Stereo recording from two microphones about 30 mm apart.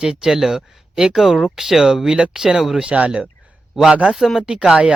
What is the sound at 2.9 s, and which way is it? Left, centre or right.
Speech, right.